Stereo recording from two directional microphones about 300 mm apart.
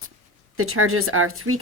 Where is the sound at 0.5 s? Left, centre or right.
Right.